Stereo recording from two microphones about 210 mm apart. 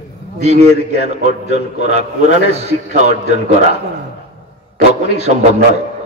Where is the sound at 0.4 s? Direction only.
30° right (ahead or behind).